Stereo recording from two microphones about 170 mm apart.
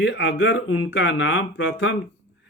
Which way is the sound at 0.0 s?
90° left.